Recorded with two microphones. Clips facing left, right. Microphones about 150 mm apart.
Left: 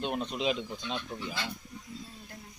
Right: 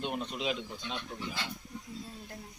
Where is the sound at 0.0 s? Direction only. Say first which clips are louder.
Left 3 dB; 20° left (ahead or behind).